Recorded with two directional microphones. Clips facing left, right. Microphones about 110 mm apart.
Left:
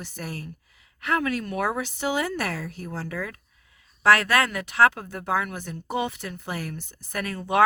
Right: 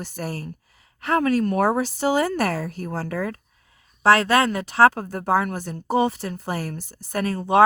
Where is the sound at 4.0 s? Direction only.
30° right (ahead or behind).